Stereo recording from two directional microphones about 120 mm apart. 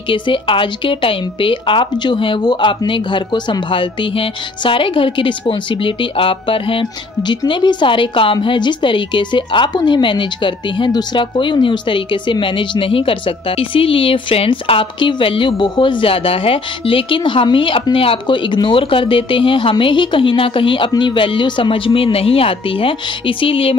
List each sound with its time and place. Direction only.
0.1 s a woman's voice: 45° left (ahead or behind)